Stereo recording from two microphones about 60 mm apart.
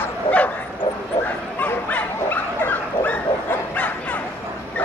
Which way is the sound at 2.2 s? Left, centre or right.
Left.